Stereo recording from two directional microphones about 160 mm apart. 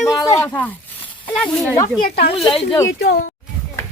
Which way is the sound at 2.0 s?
90° left.